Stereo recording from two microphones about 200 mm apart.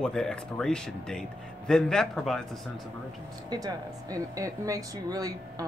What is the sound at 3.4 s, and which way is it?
Speech, 20° right (ahead or behind).